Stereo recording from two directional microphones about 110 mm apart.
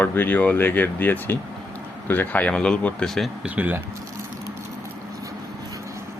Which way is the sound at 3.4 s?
15° right (ahead or behind).